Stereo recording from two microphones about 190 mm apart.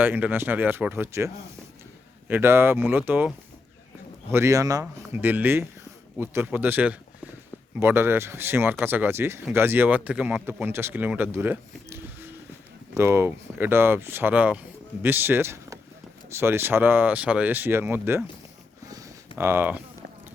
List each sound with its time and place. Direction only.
0.0 s speech: 10° right (ahead or behind)
19.4 s speech: 10° right (ahead or behind)